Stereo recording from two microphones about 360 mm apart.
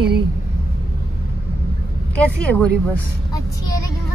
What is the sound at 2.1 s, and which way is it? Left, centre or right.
Speech, centre.